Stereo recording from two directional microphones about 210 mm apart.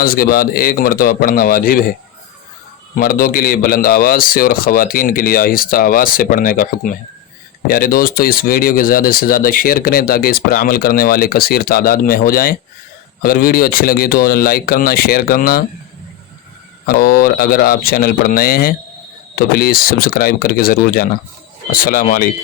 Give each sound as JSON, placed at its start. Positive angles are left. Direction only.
{"t": 0.0, "sound": "speech", "side_deg": 45}
{"t": 2.9, "sound": "speech", "side_deg": 45}
{"t": 16.8, "sound": "speech", "side_deg": 45}